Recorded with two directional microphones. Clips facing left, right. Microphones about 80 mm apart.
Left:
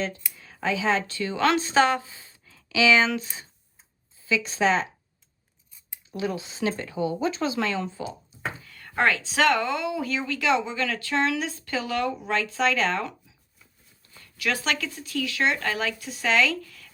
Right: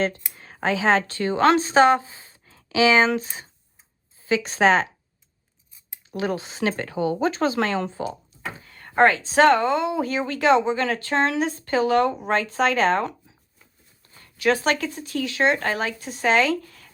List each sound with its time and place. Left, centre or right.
0.3 s speech: right
4.3 s a woman's voice: right
6.1 s speech: right
8.6 s speech: right